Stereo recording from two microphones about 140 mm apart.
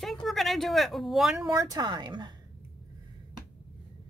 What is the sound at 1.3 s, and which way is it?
A woman's voice, 25° right (ahead or behind).